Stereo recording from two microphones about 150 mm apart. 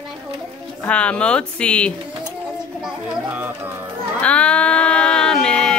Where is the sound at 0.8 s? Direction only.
10° left (ahead or behind).